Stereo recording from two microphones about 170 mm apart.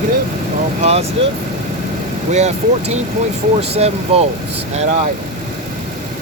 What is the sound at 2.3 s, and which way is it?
Speech, 40° right (ahead or behind).